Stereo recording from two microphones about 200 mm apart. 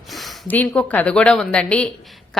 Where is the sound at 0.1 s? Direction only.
Centre (ahead or behind).